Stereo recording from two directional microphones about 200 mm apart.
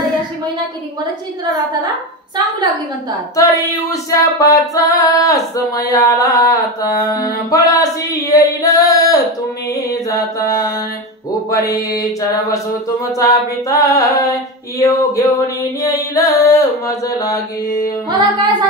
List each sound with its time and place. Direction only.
3.3 s female singing: 15° left (ahead or behind)
11.5 s female singing: 20° left (ahead or behind)
18.1 s music: 20° right (ahead or behind)